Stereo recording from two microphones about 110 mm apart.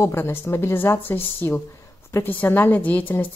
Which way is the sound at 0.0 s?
20° left (ahead or behind).